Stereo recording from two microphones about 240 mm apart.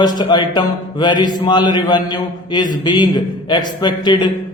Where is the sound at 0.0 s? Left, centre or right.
Centre.